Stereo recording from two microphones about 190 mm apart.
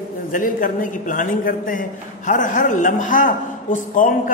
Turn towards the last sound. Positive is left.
turn(degrees=45)  # may be behind; listen again after turning